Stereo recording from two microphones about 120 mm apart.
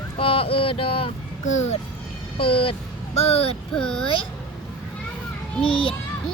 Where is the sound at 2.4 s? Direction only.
50° left (ahead or behind).